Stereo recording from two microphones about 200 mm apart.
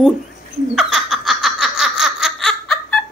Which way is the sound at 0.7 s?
Centre (ahead or behind).